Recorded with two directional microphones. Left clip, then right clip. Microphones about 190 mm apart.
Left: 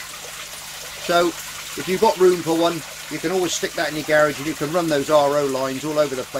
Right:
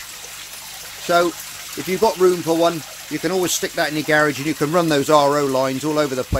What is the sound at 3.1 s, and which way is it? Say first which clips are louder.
Speech: right 2 dB; 50° right (ahead or behind).